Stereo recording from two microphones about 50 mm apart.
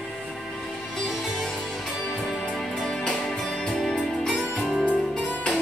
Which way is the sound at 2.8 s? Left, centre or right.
Centre.